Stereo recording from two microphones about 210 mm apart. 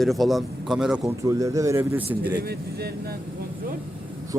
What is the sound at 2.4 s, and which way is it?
Speech, 50° right (ahead or behind).